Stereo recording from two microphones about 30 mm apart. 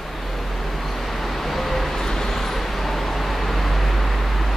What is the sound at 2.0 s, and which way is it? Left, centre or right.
Vehicle, centre.